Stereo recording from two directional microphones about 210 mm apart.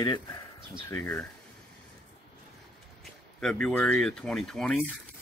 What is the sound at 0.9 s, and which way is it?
Speech, 10° left (ahead or behind).